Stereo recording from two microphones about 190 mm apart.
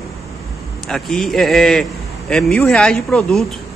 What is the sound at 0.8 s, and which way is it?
Speech, centre (ahead or behind).